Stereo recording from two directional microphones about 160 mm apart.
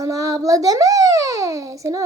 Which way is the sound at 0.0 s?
20° right (ahead or behind).